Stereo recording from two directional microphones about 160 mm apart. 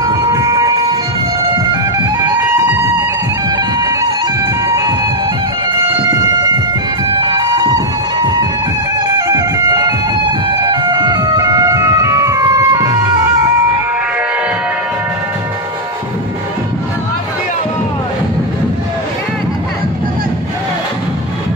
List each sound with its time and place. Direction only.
0.0 s train: 20° right (ahead or behind)
2.2 s music: 15° right (ahead or behind)
7.2 s vehicle: 30° right (ahead or behind)
9.3 s music: 25° right (ahead or behind)